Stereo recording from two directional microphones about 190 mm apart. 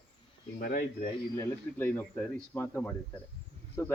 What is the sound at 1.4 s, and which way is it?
Speech, 10° left (ahead or behind).